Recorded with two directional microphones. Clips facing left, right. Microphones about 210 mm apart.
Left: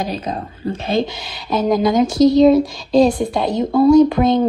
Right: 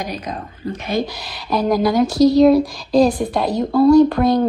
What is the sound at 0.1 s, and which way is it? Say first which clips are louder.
Speech: left 3 dB; 30° left (ahead or behind).